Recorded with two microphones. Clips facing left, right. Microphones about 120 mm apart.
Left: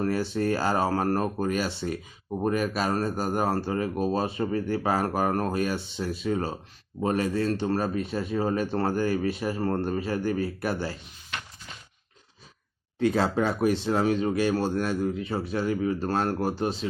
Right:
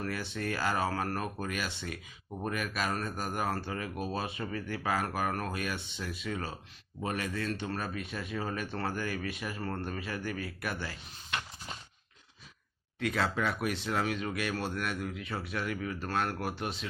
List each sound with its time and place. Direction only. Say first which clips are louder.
0.0 s speech: left 10 dB; 35° left (ahead or behind)
13.0 s speech: left 8 dB; 30° left (ahead or behind)